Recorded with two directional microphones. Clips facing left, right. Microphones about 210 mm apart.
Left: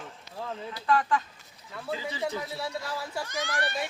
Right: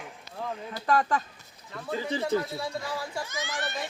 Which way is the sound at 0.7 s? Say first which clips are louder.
Even; 40° right (ahead or behind).